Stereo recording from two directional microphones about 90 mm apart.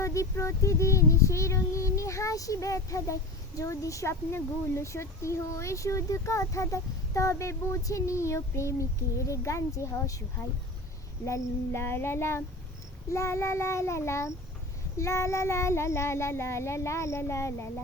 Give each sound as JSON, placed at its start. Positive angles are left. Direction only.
{"t": 0.0, "sound": "speech", "side_deg": 35}
{"t": 11.3, "sound": "child singing", "side_deg": 25}
{"t": 13.1, "sound": "speech", "side_deg": 35}